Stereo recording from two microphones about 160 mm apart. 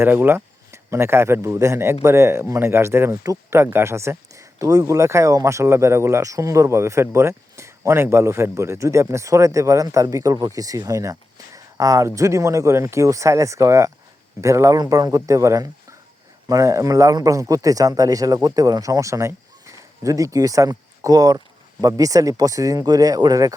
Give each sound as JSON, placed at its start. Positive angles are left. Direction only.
{"t": 0.0, "sound": "a man's voice", "side_deg": -15}